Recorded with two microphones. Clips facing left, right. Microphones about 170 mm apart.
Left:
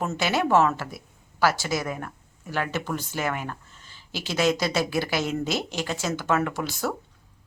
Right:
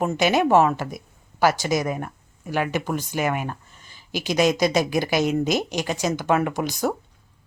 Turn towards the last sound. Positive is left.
turn(degrees=-15)  # may be behind; listen again after turning